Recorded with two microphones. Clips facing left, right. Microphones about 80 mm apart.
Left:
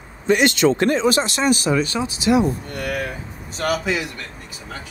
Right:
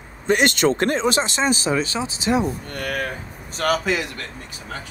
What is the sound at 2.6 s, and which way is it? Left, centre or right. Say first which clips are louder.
A man's voice: left 1 dB; right.